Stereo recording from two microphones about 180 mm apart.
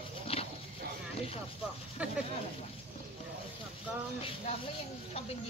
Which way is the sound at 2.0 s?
5° right (ahead or behind).